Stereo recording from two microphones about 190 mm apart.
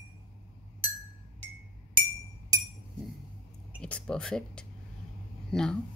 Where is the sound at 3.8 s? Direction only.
5° left (ahead or behind).